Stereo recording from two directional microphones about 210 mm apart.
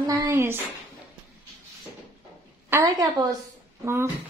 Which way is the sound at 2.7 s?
15° right (ahead or behind).